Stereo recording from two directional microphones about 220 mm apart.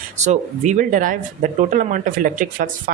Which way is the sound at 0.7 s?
35° right (ahead or behind).